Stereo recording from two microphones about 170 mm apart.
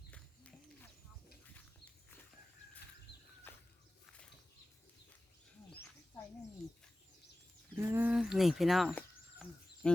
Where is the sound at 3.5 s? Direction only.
10° left (ahead or behind).